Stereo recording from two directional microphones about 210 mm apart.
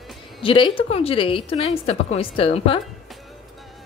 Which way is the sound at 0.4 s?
25° left (ahead or behind).